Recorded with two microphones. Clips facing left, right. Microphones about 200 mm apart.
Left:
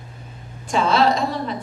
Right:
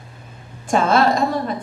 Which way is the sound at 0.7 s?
50° right (ahead or behind).